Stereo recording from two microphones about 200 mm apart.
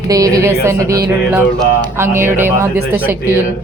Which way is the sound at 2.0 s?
10° right (ahead or behind).